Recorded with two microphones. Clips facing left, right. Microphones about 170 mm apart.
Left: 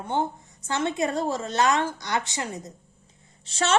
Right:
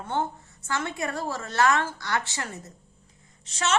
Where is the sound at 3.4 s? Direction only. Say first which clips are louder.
Left 3 dB; 30° left (ahead or behind).